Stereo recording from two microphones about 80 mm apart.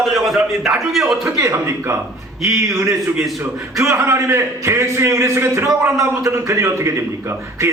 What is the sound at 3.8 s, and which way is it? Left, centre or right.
A man's voice, right.